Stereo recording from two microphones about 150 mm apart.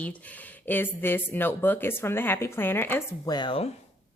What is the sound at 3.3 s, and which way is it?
Speech, 35° left (ahead or behind).